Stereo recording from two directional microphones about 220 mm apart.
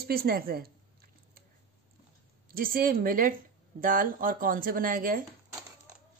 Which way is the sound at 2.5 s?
40° right (ahead or behind).